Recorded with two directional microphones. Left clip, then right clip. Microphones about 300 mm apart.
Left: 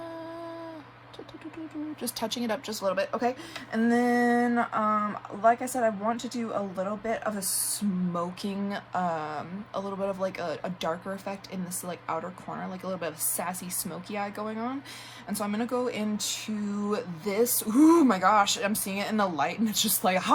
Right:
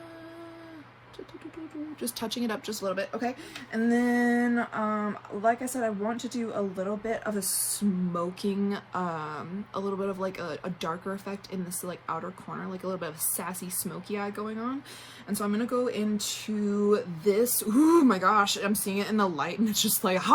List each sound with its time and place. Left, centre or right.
2.0 s speech: centre
3.7 s a sound: left
4.7 s speech: centre